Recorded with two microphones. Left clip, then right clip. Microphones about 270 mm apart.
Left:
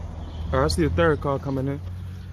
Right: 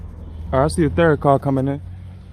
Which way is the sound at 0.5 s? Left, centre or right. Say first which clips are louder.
Right 5 dB; right.